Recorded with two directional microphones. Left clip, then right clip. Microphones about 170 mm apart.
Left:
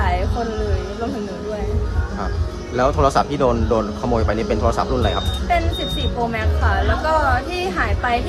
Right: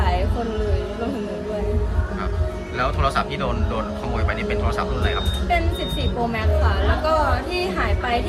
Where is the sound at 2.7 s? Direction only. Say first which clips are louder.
Left 6 dB; 35° left (ahead or behind).